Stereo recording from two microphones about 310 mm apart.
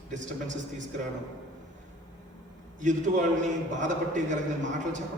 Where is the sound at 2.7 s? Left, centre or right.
Right.